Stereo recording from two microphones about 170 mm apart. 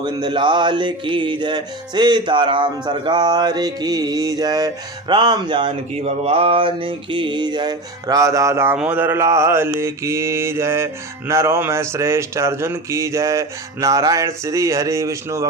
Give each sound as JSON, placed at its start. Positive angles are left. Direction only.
{"t": 0.0, "sound": "music", "side_deg": -25}
{"t": 11.3, "sound": "speech", "side_deg": -15}